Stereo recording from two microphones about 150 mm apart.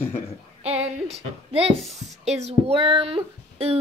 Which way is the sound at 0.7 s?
45° right (ahead or behind).